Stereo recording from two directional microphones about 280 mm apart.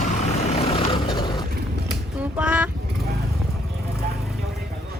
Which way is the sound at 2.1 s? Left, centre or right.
Centre.